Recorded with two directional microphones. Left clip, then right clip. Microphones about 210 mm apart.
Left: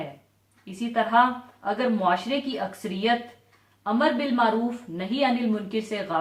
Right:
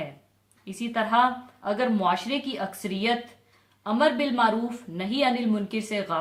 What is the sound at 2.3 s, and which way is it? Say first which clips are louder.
A woman's voice: left 2 dB; 45° right (ahead or behind).